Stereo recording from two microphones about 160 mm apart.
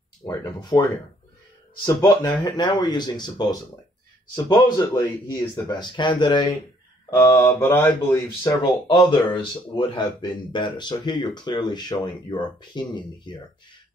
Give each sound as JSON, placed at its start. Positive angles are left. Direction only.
{"t": 0.3, "sound": "speech", "side_deg": 25}
{"t": 2.0, "sound": "speech", "side_deg": 25}
{"t": 7.1, "sound": "speech", "side_deg": 15}
{"t": 8.8, "sound": "speech", "side_deg": 30}